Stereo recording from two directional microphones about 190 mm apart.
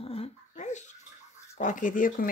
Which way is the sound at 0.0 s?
30° left (ahead or behind).